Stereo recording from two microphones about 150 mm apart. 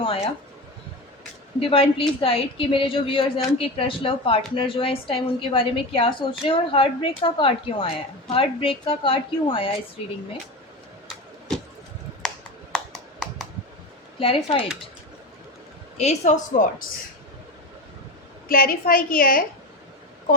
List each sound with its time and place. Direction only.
1.5 s a woman's voice: 35° left (ahead or behind)
11.1 s a sound: centre (ahead or behind)
12.7 s a sound: centre (ahead or behind)
14.2 s a woman's voice: 35° left (ahead or behind)
16.0 s speech: 50° left (ahead or behind)
18.4 s a woman's voice: 75° left (ahead or behind)